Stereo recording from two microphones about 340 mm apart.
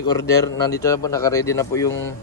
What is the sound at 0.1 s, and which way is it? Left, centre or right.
A man's voice, centre.